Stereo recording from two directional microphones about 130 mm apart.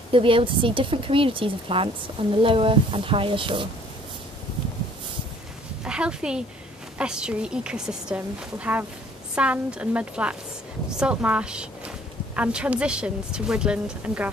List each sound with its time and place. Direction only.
0.1 s speech: 45° right (ahead or behind)
5.9 s a woman's voice: 5° right (ahead or behind)